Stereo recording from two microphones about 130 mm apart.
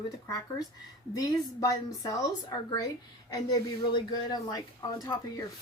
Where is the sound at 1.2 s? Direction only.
25° left (ahead or behind).